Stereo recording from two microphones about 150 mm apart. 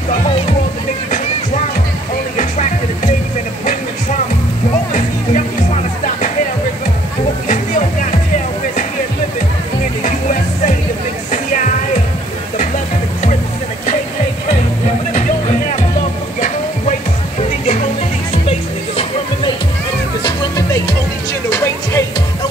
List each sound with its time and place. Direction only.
4.9 s music: 60° left (ahead or behind)
12.5 s music: 60° left (ahead or behind)
16.3 s train: 60° left (ahead or behind)
18.5 s music: 40° left (ahead or behind)
21.5 s music: 20° left (ahead or behind)